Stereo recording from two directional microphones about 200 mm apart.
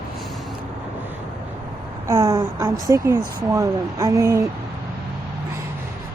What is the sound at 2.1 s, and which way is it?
Speech, 15° right (ahead or behind).